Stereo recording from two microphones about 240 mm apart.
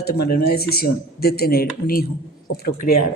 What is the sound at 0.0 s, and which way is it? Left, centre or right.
Speech, left.